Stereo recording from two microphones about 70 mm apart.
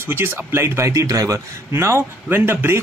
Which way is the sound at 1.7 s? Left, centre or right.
Right.